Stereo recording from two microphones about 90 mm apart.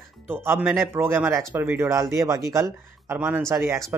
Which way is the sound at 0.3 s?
25° right (ahead or behind).